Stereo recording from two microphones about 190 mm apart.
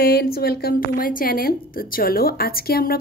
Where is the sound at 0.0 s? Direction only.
55° left (ahead or behind).